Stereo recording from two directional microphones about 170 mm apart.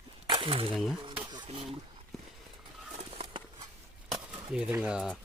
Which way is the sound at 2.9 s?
35° right (ahead or behind).